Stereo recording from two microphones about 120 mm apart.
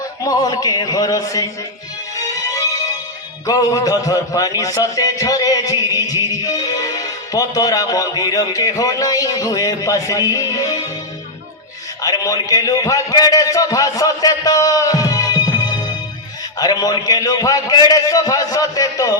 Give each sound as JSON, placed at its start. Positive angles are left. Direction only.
{"t": 0.3, "sound": "a man's voice", "side_deg": 30}
{"t": 2.1, "sound": "music", "side_deg": 30}
{"t": 3.4, "sound": "a man's voice", "side_deg": 30}
{"t": 12.0, "sound": "a man's voice", "side_deg": 30}